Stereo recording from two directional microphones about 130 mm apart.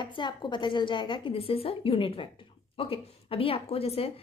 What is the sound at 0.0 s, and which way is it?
A woman's voice, 35° left (ahead or behind).